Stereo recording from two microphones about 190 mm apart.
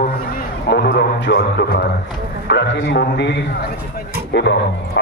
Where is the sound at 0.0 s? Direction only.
55° left (ahead or behind).